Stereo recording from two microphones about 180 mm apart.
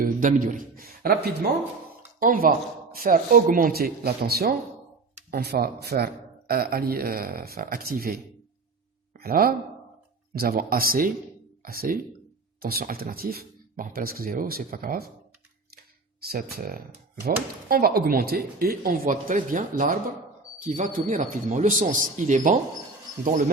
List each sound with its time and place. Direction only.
0.0 s speech: 50° right (ahead or behind)
16.2 s speech: 60° right (ahead or behind)